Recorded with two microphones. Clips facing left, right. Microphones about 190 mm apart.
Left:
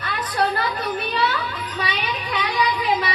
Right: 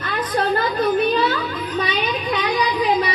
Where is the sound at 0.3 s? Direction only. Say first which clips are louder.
Right 3 dB; 45° right (ahead or behind).